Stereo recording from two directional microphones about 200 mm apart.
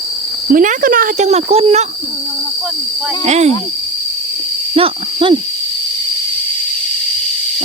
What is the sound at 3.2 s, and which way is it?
Speech, 35° right (ahead or behind).